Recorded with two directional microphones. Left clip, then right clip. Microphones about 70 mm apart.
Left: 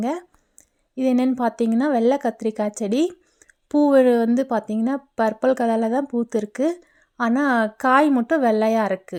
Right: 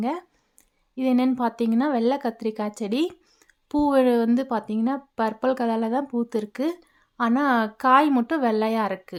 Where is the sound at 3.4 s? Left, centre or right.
Left.